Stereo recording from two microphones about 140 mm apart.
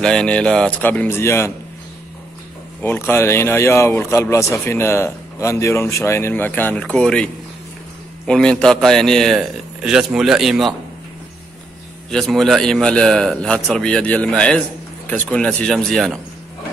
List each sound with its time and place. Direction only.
0.0 s speech: 5° left (ahead or behind)
2.8 s speech: 15° left (ahead or behind)
8.3 s a man's voice: 5° left (ahead or behind)
12.1 s a man's voice: centre (ahead or behind)